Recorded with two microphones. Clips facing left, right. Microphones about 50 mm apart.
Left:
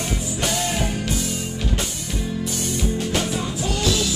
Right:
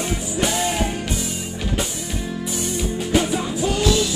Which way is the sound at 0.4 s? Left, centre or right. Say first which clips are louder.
Right 3 dB; centre.